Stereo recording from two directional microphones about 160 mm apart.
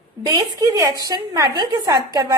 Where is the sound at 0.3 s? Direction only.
20° right (ahead or behind).